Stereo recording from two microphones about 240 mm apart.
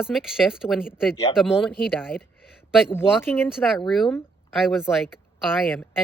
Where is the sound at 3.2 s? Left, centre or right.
Centre.